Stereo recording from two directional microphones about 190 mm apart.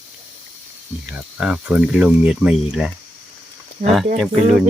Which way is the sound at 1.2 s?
5° right (ahead or behind).